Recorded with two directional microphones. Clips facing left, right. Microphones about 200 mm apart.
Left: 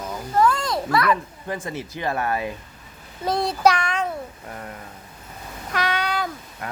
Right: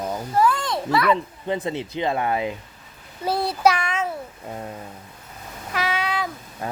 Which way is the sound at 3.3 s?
5° right (ahead or behind).